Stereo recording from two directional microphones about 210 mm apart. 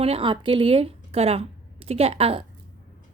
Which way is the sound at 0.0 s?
25° right (ahead or behind).